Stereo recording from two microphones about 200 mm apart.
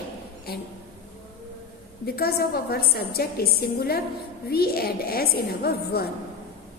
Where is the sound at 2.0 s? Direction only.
50° left (ahead or behind).